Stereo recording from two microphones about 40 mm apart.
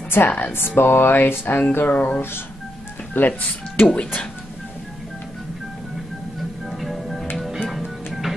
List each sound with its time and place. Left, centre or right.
0.2 s speech: left
2.0 s speech: left
6.7 s music: centre